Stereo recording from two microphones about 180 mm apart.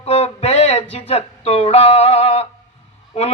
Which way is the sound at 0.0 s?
35° left (ahead or behind).